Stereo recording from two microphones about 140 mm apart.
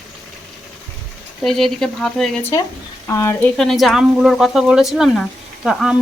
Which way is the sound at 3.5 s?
Centre (ahead or behind).